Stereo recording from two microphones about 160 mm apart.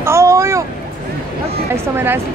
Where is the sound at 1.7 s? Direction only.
15° right (ahead or behind).